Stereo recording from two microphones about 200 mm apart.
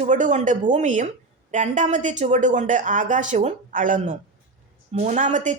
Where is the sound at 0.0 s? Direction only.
40° right (ahead or behind).